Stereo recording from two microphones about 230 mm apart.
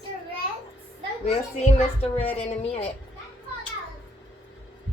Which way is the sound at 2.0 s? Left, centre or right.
Left.